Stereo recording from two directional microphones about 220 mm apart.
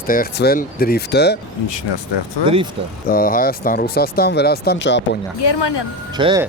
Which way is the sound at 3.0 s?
40° left (ahead or behind).